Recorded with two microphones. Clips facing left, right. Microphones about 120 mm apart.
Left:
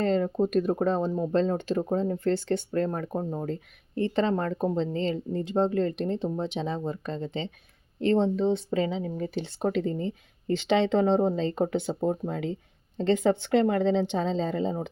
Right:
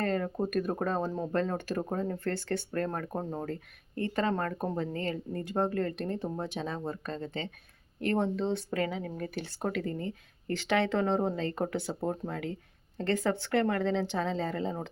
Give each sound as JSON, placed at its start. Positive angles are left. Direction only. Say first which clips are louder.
{"t": 0.0, "sound": "speech", "louder": "left 6 dB", "side_deg": 20}